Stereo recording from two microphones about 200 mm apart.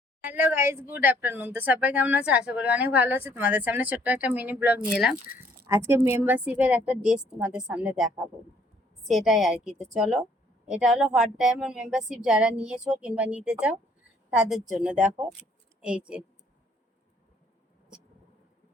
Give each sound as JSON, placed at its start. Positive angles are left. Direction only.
{"t": 0.2, "sound": "a woman's voice", "side_deg": -10}